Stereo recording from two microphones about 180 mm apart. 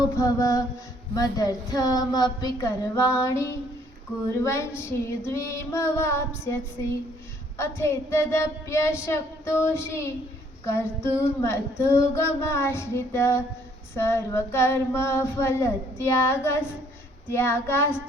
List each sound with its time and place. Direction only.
0.2 s a woman's voice: 20° left (ahead or behind)
4.4 s child singing: 15° left (ahead or behind)
7.6 s child singing: 15° left (ahead or behind)